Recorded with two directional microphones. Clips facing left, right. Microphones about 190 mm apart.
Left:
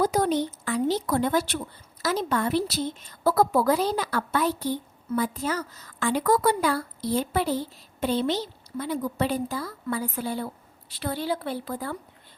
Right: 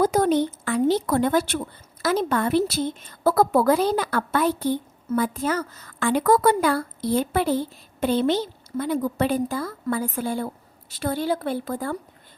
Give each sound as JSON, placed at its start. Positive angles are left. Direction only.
{"t": 0.0, "sound": "a woman's voice", "side_deg": -50}